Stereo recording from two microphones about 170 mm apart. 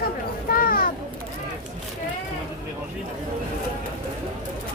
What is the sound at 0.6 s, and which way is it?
Children playing, 60° left (ahead or behind).